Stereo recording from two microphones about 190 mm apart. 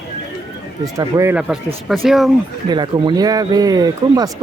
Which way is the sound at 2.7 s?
20° right (ahead or behind).